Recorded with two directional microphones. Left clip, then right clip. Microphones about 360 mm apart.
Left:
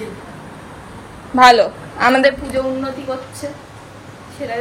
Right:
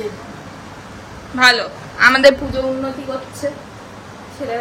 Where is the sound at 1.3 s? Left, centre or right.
Centre.